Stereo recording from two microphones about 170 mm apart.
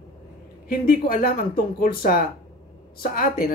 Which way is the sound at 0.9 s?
55° left (ahead or behind).